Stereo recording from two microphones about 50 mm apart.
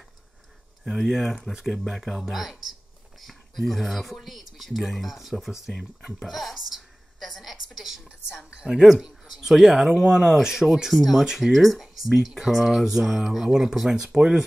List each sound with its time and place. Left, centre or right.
0.8 s speech: centre
6.5 s a sound: centre
8.5 s a woman's voice: centre
10.7 s speech: centre